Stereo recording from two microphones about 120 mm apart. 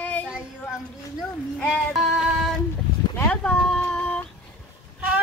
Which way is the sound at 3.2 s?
5° left (ahead or behind).